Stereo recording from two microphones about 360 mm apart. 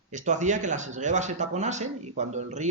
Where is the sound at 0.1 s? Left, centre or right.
Centre.